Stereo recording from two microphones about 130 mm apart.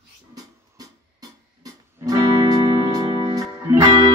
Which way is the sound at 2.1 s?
30° right (ahead or behind).